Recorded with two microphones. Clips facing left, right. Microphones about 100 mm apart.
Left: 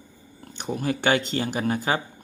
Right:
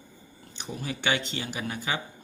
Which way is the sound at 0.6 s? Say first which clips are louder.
Left 8 dB; 50° left (ahead or behind).